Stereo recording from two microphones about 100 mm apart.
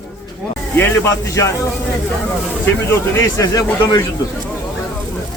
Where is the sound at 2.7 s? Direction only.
25° left (ahead or behind).